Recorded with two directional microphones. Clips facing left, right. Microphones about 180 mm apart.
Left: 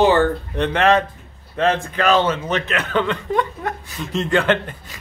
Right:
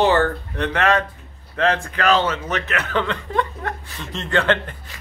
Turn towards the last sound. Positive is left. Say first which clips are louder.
# left 1 dB
turn(degrees=15)  # may be behind; listen again after turning